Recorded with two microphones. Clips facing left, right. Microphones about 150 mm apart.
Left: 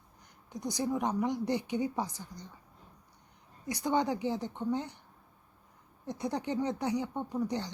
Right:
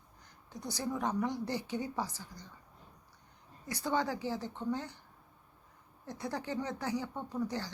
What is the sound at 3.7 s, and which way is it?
A woman's voice, 15° left (ahead or behind).